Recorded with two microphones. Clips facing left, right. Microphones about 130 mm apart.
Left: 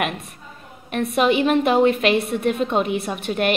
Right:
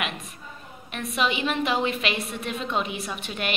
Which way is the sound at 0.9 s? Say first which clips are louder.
Left 8 dB; 55° left (ahead or behind).